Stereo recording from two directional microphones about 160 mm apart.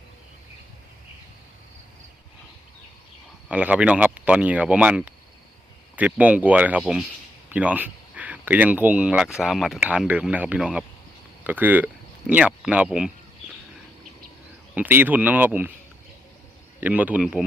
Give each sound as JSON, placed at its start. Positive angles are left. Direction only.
{"t": 3.5, "sound": "speech", "side_deg": -10}
{"t": 14.8, "sound": "speech", "side_deg": -10}
{"t": 16.8, "sound": "speech", "side_deg": -10}